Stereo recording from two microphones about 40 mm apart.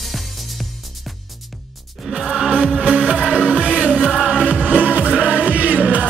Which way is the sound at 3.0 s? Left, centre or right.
Centre.